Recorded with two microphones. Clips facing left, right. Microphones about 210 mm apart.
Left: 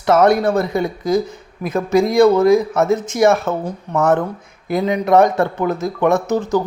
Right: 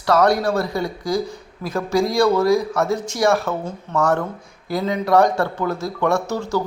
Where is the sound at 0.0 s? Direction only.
20° left (ahead or behind).